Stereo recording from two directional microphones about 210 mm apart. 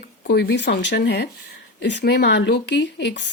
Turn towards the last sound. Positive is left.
turn(degrees=55)  # may be behind; listen again after turning